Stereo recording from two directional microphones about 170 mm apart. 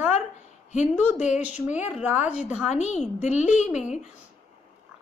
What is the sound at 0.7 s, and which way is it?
Speech, 45° left (ahead or behind).